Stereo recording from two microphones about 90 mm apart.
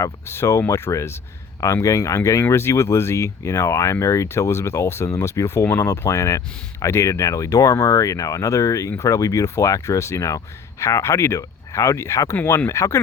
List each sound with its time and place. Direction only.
0.0 s speech: 30° left (ahead or behind)